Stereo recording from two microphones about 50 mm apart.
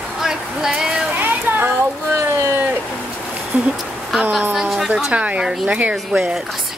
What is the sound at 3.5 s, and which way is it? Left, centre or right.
Speech, right.